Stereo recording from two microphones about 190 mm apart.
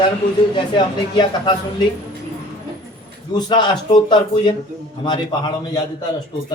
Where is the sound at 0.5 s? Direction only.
25° left (ahead or behind).